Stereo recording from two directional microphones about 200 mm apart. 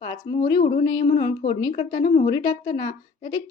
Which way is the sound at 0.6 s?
35° left (ahead or behind).